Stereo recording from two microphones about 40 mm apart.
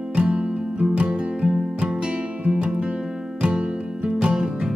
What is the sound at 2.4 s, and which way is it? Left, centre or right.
Music, right.